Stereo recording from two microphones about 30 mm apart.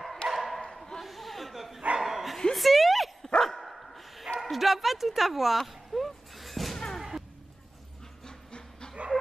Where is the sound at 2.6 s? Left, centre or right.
Centre.